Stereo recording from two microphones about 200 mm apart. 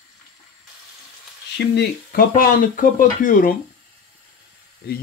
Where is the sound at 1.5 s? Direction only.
50° left (ahead or behind).